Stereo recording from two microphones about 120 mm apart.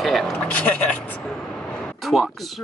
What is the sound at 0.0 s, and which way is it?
Vehicle, centre (ahead or behind).